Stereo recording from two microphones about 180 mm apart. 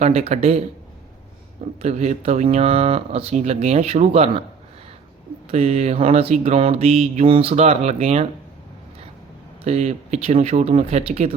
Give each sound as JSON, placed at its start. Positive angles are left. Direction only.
{"t": 0.0, "sound": "mantra", "side_deg": -35}
{"t": 1.8, "sound": "mantra", "side_deg": -40}
{"t": 5.5, "sound": "mantra", "side_deg": -35}
{"t": 9.6, "sound": "mantra", "side_deg": -35}